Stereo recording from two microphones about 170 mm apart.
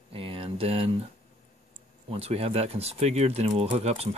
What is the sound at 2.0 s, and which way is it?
Speech, 35° right (ahead or behind).